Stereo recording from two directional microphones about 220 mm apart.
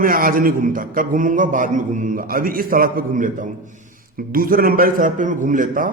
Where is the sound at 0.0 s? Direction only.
40° right (ahead or behind).